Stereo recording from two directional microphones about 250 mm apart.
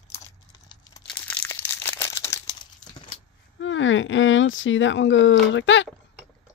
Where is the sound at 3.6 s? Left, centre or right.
Left.